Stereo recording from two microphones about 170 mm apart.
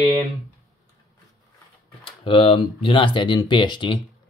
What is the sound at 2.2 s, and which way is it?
Speech, 35° left (ahead or behind).